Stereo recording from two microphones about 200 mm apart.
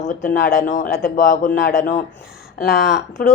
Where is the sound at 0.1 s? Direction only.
40° left (ahead or behind).